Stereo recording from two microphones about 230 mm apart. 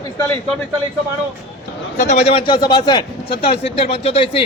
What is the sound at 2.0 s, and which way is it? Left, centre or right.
A man's voice, left.